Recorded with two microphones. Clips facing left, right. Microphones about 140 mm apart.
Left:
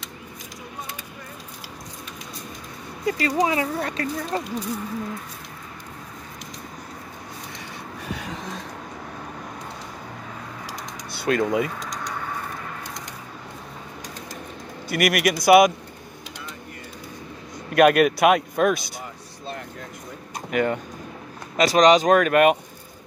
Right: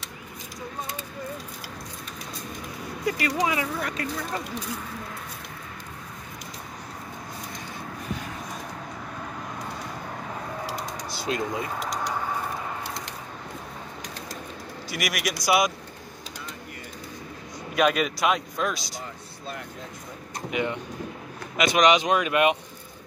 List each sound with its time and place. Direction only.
3.1 s speech: 30° left (ahead or behind)
11.2 s speech: 65° left (ahead or behind)
14.9 s speech: 60° left (ahead or behind)
17.7 s speech: 60° left (ahead or behind)
20.5 s speech: 50° left (ahead or behind)
21.5 s speech: 35° left (ahead or behind)